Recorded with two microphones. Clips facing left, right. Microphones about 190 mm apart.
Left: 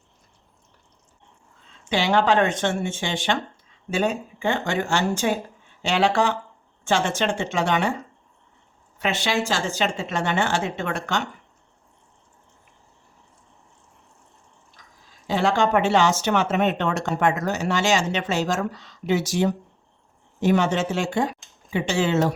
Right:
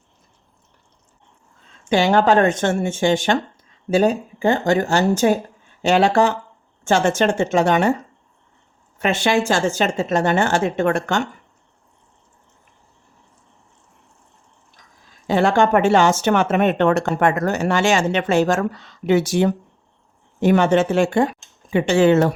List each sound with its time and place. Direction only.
1.9 s speech: 45° right (ahead or behind)
9.0 s speech: 50° right (ahead or behind)
15.3 s speech: 55° right (ahead or behind)